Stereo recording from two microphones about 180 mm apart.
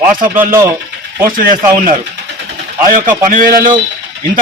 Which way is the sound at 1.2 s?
50° right (ahead or behind).